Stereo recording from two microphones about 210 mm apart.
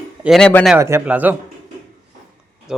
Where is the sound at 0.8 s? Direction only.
15° right (ahead or behind).